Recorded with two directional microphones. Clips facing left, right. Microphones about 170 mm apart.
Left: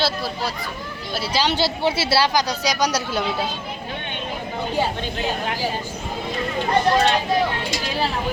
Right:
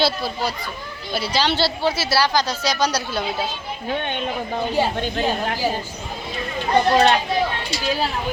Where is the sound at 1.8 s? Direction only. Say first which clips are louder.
Left 2 dB; 25° left (ahead or behind).